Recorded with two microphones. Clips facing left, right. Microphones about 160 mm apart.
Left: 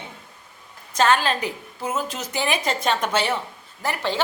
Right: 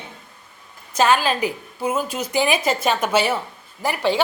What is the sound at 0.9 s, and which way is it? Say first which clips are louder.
A woman's voice: right 2 dB; 10° right (ahead or behind).